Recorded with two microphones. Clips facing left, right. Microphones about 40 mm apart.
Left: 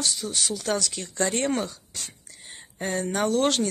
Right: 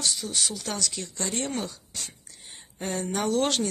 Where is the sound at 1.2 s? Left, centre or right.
Left.